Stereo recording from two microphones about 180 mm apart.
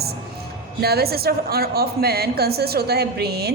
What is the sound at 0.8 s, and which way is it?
A woman's voice, 60° right (ahead or behind).